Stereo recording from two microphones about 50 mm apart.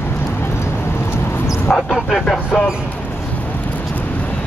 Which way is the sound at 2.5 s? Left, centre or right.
Centre.